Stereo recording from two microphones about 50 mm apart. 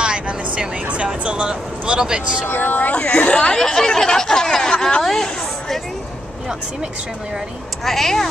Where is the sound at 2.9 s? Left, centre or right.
Centre.